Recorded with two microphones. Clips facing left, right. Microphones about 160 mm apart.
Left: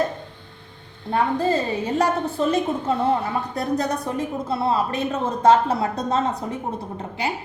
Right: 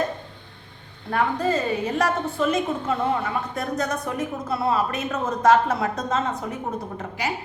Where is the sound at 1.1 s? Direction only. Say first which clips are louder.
Left 2 dB; 30° left (ahead or behind).